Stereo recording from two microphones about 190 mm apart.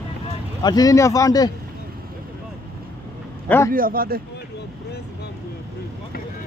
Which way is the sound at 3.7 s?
50° right (ahead or behind).